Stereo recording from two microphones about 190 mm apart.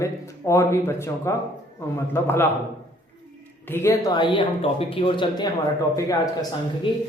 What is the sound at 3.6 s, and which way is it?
A woman's voice, 10° left (ahead or behind).